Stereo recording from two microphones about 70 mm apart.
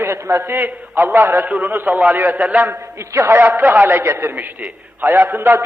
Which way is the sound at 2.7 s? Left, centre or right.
Right.